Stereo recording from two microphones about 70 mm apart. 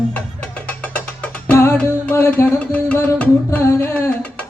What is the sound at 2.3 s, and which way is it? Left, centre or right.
Music, left.